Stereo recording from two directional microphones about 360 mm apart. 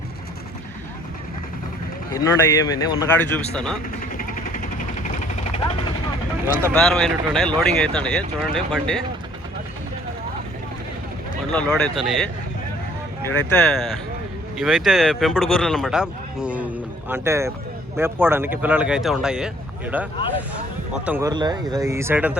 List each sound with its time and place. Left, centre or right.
2.1 s speech: centre
4.2 s vehicle: left
6.6 s speech: centre
11.5 s speech: centre